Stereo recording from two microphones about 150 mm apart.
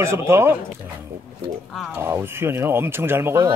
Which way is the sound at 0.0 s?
15° right (ahead or behind).